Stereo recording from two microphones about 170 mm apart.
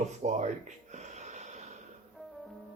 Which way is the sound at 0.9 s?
45° right (ahead or behind).